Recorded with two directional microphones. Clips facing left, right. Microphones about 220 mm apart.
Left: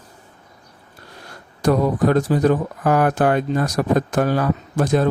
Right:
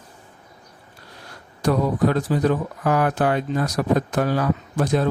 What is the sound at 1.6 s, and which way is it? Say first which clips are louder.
Speech: left 3 dB; 45° left (ahead or behind).